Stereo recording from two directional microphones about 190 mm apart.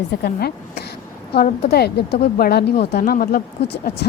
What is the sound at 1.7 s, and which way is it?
Speech, 55° left (ahead or behind).